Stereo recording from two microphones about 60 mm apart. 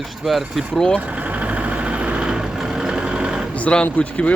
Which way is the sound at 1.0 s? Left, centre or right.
Right.